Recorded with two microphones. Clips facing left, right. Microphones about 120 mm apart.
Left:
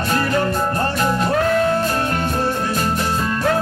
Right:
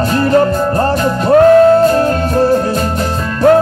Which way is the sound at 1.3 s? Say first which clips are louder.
Right 15 dB; 35° right (ahead or behind).